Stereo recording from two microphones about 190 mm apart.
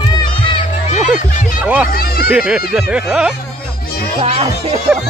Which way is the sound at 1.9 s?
55° left (ahead or behind).